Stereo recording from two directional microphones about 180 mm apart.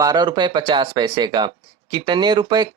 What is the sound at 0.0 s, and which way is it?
Speech, 20° right (ahead or behind).